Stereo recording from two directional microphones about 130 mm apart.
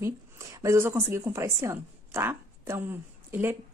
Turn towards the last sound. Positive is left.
turn(degrees=-15)  # may be behind; listen again after turning